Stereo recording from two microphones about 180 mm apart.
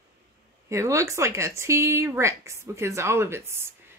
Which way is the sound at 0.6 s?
15° right (ahead or behind).